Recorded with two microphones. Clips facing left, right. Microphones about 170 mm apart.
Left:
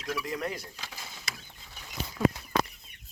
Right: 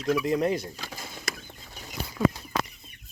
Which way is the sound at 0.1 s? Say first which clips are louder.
Right 9 dB; 20° right (ahead or behind).